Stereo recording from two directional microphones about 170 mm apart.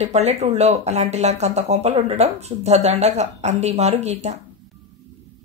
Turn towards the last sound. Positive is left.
turn(degrees=-40)  # may be behind; listen again after turning